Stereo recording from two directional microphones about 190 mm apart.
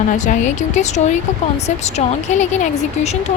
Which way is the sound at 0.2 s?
40° left (ahead or behind).